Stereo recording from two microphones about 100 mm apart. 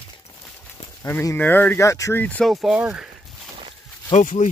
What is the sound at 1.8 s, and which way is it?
Speech, 35° left (ahead or behind).